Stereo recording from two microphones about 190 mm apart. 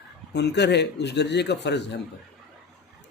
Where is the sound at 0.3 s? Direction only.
65° left (ahead or behind).